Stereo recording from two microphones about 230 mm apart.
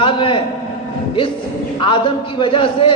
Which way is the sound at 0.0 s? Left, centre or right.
Left.